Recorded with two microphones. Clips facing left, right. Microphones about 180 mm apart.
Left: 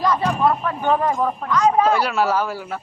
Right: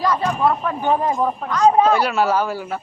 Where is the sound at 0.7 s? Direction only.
15° right (ahead or behind).